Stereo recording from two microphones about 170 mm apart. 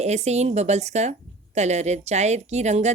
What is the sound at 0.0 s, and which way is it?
A woman's voice, 40° right (ahead or behind).